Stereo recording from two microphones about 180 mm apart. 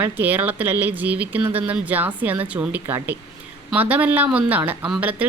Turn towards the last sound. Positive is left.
turn(degrees=-5)  # may be behind; listen again after turning